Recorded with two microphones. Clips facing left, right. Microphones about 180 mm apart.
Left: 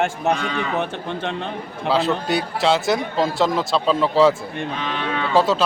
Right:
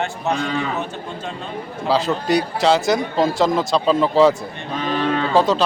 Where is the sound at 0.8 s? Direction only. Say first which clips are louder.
Left 3 dB; 65° left (ahead or behind).